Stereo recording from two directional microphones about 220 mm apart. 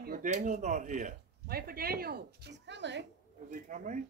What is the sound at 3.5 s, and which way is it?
Speech, 35° right (ahead or behind).